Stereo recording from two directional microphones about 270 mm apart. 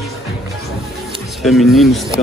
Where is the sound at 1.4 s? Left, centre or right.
Centre.